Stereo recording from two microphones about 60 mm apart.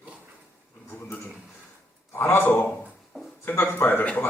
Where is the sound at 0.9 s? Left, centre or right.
Left.